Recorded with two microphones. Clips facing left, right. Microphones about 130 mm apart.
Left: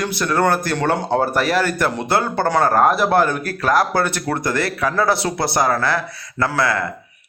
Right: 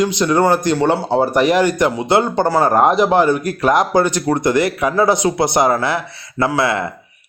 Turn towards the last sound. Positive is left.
turn(degrees=-20)  # may be behind; listen again after turning